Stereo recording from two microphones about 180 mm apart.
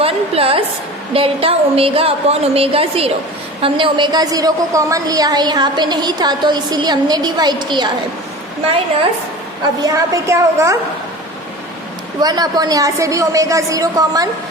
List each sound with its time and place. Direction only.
0.0 s a woman's voice: 30° right (ahead or behind)
9.8 s a woman's voice: 15° right (ahead or behind)
12.2 s a woman's voice: 20° right (ahead or behind)